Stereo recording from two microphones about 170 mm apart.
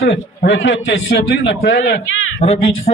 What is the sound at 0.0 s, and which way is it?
A man's voice, 90° left.